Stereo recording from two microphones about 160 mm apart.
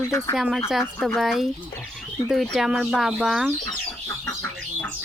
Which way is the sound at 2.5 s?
5° right (ahead or behind).